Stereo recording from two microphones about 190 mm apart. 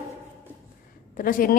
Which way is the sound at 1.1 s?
45° left (ahead or behind).